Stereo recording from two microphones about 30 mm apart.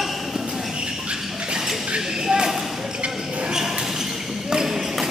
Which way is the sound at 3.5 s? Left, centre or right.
Centre.